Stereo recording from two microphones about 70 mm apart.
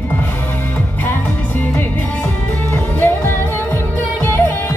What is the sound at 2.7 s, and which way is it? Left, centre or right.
Music, left.